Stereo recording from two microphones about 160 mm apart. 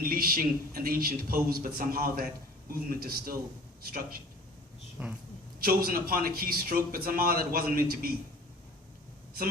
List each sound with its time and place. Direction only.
0.0 s a man's voice: 65° right (ahead or behind)
5.0 s speech: 5° right (ahead or behind)
5.5 s a man's voice: 70° right (ahead or behind)